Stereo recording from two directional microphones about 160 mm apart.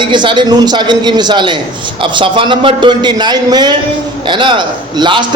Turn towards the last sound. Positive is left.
turn(degrees=-30)  # may be behind; listen again after turning